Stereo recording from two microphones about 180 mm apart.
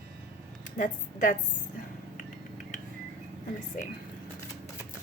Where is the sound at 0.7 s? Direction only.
45° left (ahead or behind).